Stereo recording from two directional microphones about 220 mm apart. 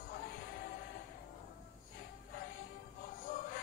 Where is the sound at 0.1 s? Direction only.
40° left (ahead or behind).